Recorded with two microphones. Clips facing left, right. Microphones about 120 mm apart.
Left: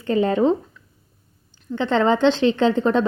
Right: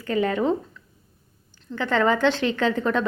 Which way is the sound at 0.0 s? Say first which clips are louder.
Left 4 dB; 30° left (ahead or behind).